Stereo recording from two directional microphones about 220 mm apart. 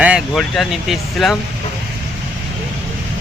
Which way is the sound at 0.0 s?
Centre (ahead or behind).